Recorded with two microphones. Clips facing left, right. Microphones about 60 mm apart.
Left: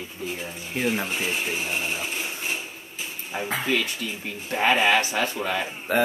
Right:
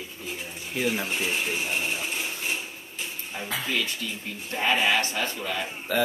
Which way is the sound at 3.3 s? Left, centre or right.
Left.